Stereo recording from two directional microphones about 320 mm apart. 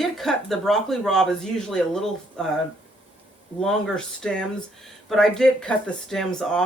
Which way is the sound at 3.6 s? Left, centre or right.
Centre.